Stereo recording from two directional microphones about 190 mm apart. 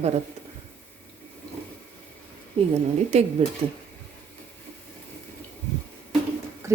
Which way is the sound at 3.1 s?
35° right (ahead or behind).